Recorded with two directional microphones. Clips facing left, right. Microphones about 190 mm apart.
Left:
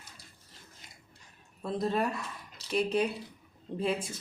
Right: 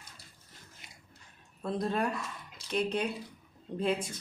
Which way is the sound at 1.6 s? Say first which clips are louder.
Left 1 dB; centre (ahead or behind).